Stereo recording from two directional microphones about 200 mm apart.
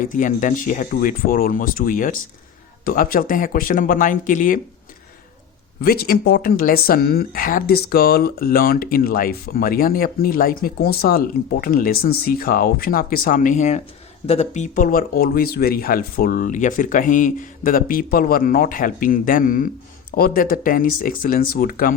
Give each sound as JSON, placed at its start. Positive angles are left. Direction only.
{"t": 0.0, "sound": "speech", "side_deg": 40}
{"t": 5.8, "sound": "speech", "side_deg": 50}